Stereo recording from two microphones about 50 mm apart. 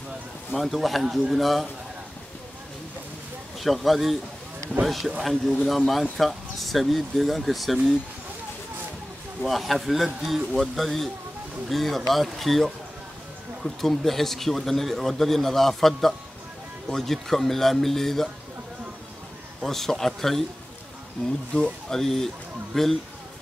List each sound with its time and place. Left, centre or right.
0.5 s speech: centre
3.5 s speech: centre
9.4 s speech: centre
19.6 s speech: centre
21.2 s speech: left
21.8 s speech: centre